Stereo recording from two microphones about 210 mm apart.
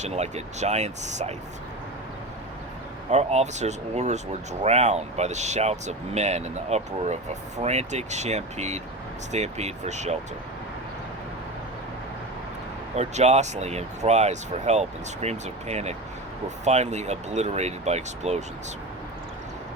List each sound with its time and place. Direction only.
0.0 s speech: 30° right (ahead or behind)
3.1 s speech: 30° right (ahead or behind)
13.0 s speech: 30° right (ahead or behind)